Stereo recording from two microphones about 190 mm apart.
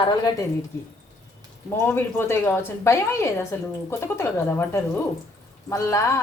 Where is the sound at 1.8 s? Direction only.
10° left (ahead or behind).